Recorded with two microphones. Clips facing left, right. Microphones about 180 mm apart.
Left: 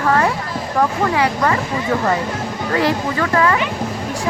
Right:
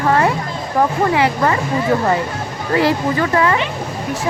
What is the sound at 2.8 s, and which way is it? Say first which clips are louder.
Speech: right 3 dB; 25° right (ahead or behind).